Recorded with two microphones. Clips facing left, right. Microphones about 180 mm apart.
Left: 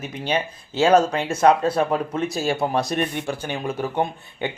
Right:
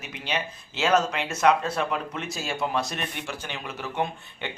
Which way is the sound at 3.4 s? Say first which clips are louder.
Left 9 dB; 50° left (ahead or behind).